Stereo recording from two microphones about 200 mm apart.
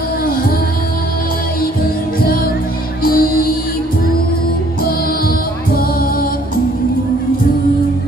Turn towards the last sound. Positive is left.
turn(degrees=45)  # may be behind; listen again after turning